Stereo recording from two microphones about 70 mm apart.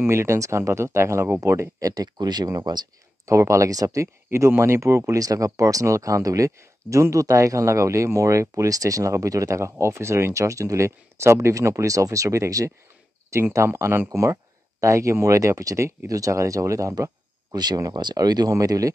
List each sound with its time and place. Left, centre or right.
0.0 s speech: right
1.9 s speech: right
3.3 s speech: right
17.6 s speech: right
18.5 s speech: right